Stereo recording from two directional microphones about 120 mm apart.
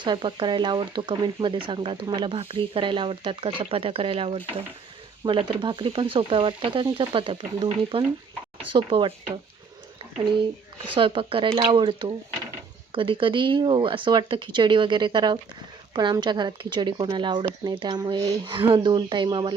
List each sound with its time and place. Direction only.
0.0 s speech: 40° right (ahead or behind)
10.9 s speech: 45° right (ahead or behind)